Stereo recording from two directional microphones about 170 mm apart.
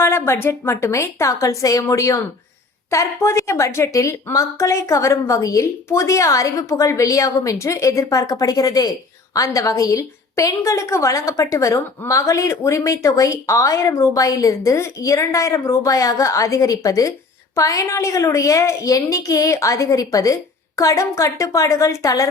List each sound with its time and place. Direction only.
0.0 s a woman's voice: 15° left (ahead or behind)